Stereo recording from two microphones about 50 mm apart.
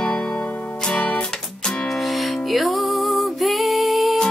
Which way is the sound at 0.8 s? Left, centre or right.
Left.